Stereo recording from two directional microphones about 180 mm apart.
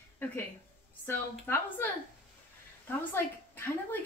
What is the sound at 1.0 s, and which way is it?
Speech, 10° left (ahead or behind).